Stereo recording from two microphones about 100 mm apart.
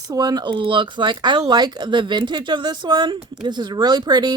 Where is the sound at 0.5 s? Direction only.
55° right (ahead or behind).